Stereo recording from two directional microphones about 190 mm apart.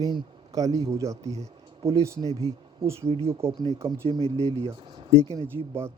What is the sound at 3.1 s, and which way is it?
Speech, 30° right (ahead or behind).